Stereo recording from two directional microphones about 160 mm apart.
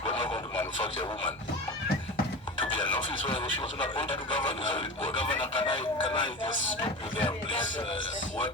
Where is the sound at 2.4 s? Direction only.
30° left (ahead or behind).